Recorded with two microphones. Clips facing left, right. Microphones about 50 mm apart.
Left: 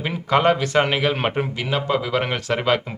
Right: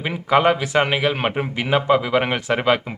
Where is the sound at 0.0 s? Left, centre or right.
Centre.